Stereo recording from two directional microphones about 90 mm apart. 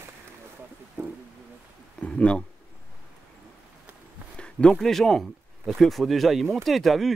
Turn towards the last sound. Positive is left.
turn(degrees=0)  # may be behind; listen again after turning